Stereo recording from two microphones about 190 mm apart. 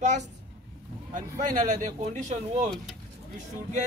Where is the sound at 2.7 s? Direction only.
Centre (ahead or behind).